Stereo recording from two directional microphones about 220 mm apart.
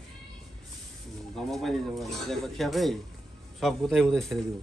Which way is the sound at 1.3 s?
Centre (ahead or behind).